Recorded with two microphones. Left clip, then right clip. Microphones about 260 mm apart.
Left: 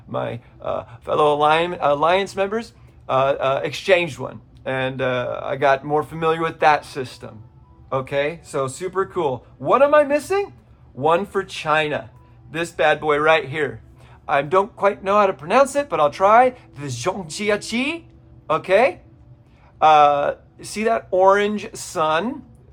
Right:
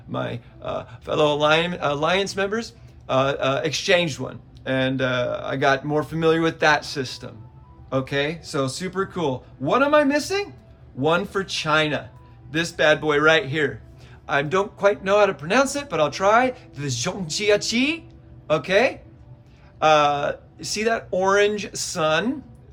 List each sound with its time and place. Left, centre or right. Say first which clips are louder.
0.1 s speech: left 3 dB; left